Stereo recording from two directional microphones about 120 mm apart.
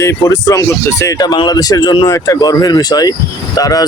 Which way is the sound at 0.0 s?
25° left (ahead or behind).